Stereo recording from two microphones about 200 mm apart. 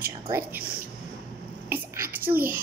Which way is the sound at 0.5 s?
50° right (ahead or behind).